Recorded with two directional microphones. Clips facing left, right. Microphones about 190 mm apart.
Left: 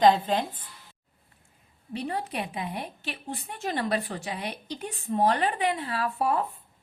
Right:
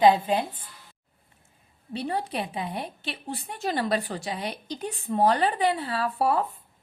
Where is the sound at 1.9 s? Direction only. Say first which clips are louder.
Right 2 dB; 30° right (ahead or behind).